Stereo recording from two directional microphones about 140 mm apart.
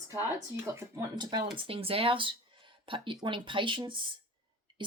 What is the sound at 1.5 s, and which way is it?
Speech, 40° right (ahead or behind).